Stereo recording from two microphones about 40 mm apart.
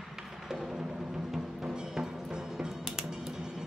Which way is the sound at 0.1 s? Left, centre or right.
Centre.